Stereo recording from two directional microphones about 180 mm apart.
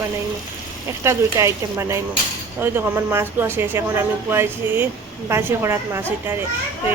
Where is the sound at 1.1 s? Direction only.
15° right (ahead or behind).